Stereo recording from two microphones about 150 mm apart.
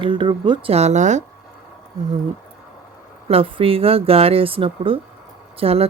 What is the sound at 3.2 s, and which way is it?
Speech, 40° right (ahead or behind).